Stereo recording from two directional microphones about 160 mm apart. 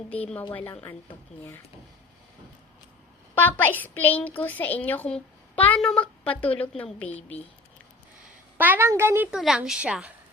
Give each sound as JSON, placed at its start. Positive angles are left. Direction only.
{"t": 0.5, "sound": "a woman's voice", "side_deg": 10}
{"t": 3.3, "sound": "a woman's voice", "side_deg": 10}
{"t": 7.2, "sound": "speech", "side_deg": 40}
{"t": 8.5, "sound": "a woman's voice", "side_deg": -10}